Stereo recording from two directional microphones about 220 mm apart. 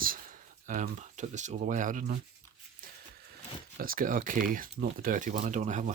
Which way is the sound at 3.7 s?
40° right (ahead or behind).